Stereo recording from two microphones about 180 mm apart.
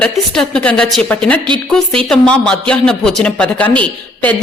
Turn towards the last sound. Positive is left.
turn(degrees=5)  # may be behind; listen again after turning